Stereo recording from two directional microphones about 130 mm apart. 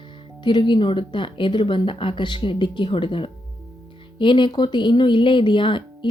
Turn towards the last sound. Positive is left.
turn(degrees=40)  # may be behind; listen again after turning